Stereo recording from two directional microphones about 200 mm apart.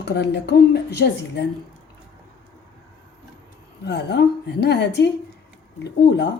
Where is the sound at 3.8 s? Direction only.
55° left (ahead or behind).